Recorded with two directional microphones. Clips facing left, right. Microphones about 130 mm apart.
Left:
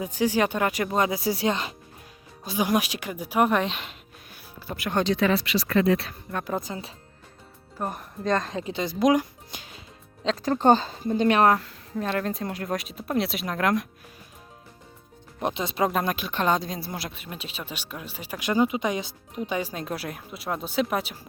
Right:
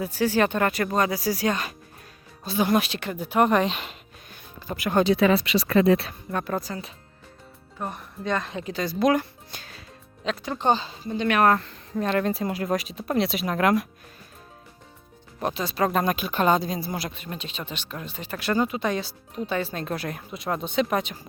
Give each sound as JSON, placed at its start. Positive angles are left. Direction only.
{"t": 0.0, "sound": "speech", "side_deg": 15}
{"t": 5.5, "sound": "speech", "side_deg": -25}
{"t": 6.6, "sound": "speech", "side_deg": 20}
{"t": 7.8, "sound": "speech", "side_deg": 5}
{"t": 8.2, "sound": "speech", "side_deg": 40}
{"t": 8.6, "sound": "speech", "side_deg": 20}
{"t": 10.4, "sound": "speech", "side_deg": 40}
{"t": 11.5, "sound": "speech", "side_deg": 5}
{"t": 15.4, "sound": "speech", "side_deg": 20}
{"t": 15.9, "sound": "speech", "side_deg": 0}